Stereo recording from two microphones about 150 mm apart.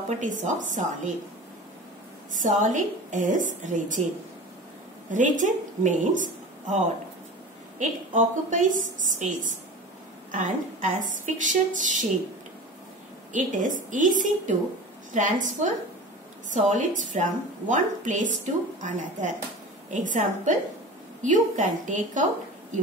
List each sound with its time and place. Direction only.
0.2 s a woman's voice: 55° right (ahead or behind)
2.3 s a woman's voice: 55° right (ahead or behind)
5.1 s a woman's voice: 60° right (ahead or behind)
7.8 s a woman's voice: 55° right (ahead or behind)
13.3 s a woman's voice: 60° right (ahead or behind)